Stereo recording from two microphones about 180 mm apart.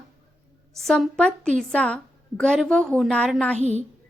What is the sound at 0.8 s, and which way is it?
A woman's voice, centre (ahead or behind).